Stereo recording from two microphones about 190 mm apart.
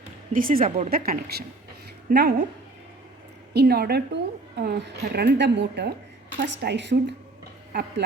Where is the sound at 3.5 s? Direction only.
60° right (ahead or behind).